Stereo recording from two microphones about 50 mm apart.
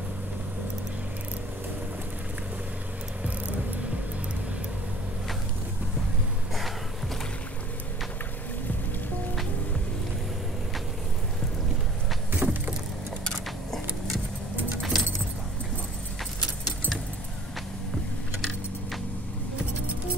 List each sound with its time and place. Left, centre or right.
12.4 s vehicle: right
13.7 s vehicle: centre
14.8 s keys jangling: centre